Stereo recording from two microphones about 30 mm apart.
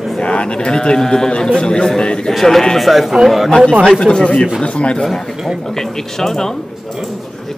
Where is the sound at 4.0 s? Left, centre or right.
Left.